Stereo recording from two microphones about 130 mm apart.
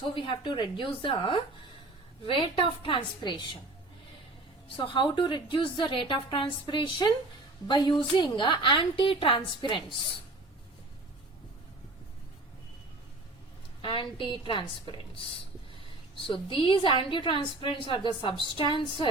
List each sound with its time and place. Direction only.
0.0 s a woman's voice: 40° left (ahead or behind)
4.8 s a woman's voice: 40° left (ahead or behind)
13.8 s a woman's voice: 40° left (ahead or behind)